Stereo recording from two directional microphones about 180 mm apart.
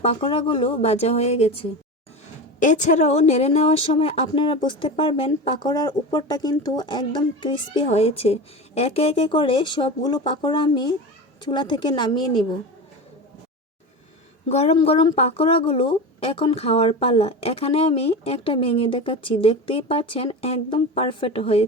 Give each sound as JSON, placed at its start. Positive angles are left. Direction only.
{"t": 0.0, "sound": "speech", "side_deg": 35}
{"t": 2.6, "sound": "speech", "side_deg": 45}
{"t": 14.5, "sound": "speech", "side_deg": 35}